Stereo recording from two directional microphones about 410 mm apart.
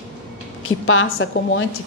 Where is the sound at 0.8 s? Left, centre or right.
Left.